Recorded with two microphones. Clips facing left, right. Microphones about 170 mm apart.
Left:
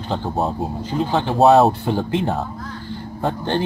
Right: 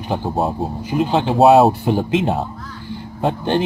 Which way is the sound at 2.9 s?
15° right (ahead or behind).